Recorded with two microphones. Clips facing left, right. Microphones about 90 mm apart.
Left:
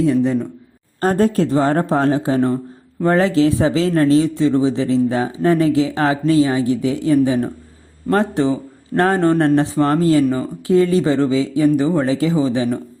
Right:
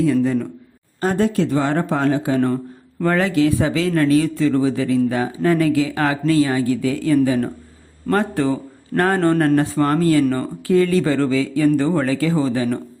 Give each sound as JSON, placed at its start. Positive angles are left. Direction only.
{"t": 0.0, "sound": "speech", "side_deg": 25}
{"t": 1.0, "sound": "speech", "side_deg": 40}
{"t": 10.2, "sound": "speech", "side_deg": 10}
{"t": 10.7, "sound": "speech", "side_deg": 25}